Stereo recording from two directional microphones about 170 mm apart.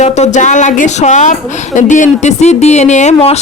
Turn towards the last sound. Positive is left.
turn(degrees=40)  # may be behind; listen again after turning